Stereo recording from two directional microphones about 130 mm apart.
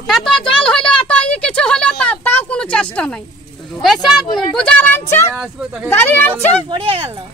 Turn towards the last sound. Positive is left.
turn(degrees=-45)  # may be behind; listen again after turning